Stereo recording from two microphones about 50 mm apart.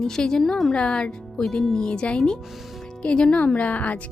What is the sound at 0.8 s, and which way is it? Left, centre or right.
A woman's voice, centre.